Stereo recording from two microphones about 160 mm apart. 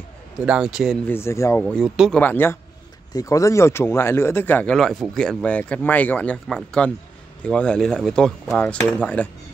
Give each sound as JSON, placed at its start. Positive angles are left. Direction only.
{"t": 0.5, "sound": "speech", "side_deg": -5}
{"t": 1.0, "sound": "speech", "side_deg": 15}